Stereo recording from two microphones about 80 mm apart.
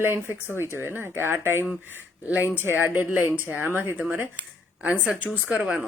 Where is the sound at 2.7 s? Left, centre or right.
Right.